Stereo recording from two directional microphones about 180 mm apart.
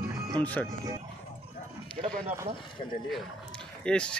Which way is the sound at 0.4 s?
10° left (ahead or behind).